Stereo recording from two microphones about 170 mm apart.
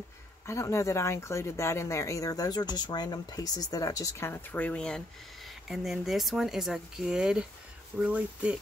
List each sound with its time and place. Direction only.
0.5 s speech: 15° left (ahead or behind); by 8.5 s 5° right (ahead or behind)